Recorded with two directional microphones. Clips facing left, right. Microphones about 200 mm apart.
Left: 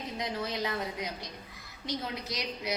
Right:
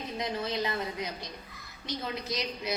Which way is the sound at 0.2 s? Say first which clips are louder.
Right 2 dB; 15° left (ahead or behind).